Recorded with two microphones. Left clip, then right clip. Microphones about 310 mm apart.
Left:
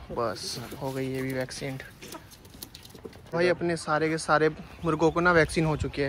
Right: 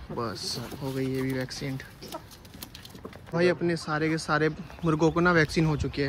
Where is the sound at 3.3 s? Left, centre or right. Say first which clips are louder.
Even; centre.